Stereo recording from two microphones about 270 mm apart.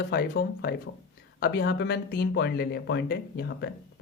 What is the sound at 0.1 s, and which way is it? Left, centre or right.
Speech, left.